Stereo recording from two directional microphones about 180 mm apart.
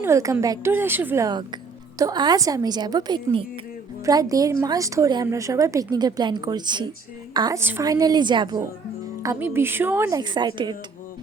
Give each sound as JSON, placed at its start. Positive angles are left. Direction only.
{"t": 0.0, "sound": "a woman's voice", "side_deg": -15}